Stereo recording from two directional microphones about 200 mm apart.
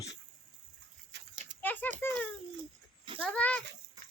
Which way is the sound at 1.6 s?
10° left (ahead or behind).